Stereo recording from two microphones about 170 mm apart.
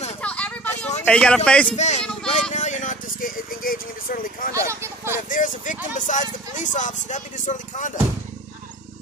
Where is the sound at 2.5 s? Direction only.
45° left (ahead or behind).